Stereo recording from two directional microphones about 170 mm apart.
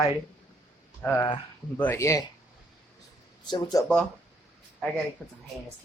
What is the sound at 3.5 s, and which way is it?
Speech, 25° left (ahead or behind).